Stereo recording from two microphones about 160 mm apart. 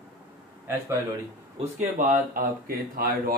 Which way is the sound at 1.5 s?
50° right (ahead or behind).